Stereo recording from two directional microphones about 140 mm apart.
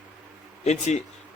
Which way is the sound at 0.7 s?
55° left (ahead or behind).